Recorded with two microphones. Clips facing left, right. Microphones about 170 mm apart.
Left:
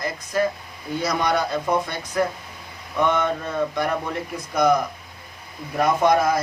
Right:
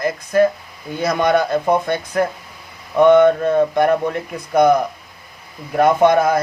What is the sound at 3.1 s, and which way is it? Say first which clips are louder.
Mantra: right 15 dB; 55° right (ahead or behind).